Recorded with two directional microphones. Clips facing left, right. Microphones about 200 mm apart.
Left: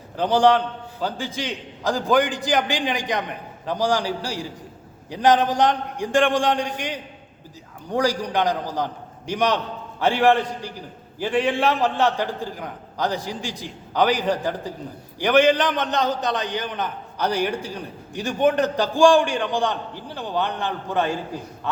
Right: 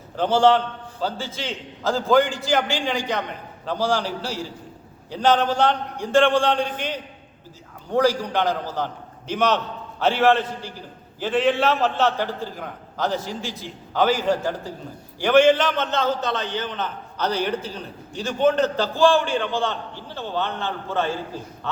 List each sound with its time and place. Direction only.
0.2 s a man's voice: 15° left (ahead or behind)